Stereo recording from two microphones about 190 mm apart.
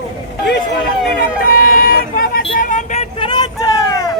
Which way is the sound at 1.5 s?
50° left (ahead or behind).